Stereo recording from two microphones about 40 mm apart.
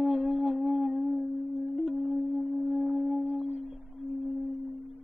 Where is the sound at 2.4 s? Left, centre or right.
Centre.